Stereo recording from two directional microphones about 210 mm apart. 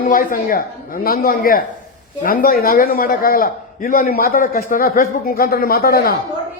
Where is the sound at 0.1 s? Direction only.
40° left (ahead or behind).